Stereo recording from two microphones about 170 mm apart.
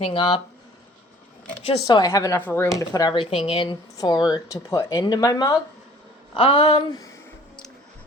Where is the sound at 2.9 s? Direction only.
25° left (ahead or behind).